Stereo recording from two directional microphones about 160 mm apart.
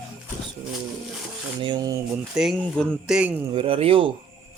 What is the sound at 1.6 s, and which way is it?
Speech, 30° right (ahead or behind).